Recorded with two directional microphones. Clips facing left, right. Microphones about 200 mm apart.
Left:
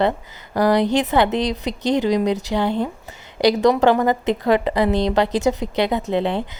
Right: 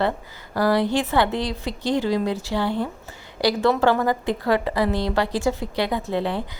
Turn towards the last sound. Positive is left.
turn(degrees=20)  # may be behind; listen again after turning